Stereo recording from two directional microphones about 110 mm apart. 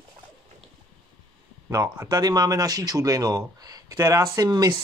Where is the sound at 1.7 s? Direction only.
30° right (ahead or behind).